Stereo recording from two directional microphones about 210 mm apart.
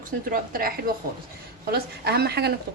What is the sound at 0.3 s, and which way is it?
A woman's voice, 45° right (ahead or behind).